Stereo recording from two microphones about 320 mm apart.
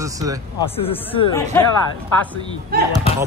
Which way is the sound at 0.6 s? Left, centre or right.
Centre.